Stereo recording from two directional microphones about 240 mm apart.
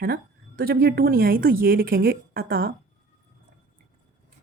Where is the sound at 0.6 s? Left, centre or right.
Right.